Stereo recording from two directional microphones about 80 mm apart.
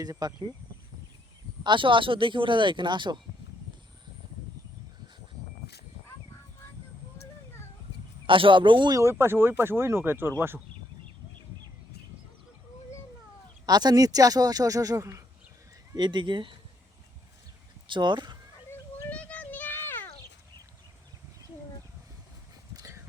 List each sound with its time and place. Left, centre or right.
0.0 s speech: right
1.6 s speech: right
8.3 s speech: right
8.9 s speech: right
13.7 s speech: right
16.0 s speech: right
17.8 s speech: right
19.1 s a sound: centre
22.7 s a sound: right